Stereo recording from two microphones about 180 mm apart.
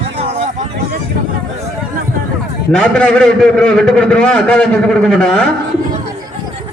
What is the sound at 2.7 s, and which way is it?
A man's voice, 5° left (ahead or behind).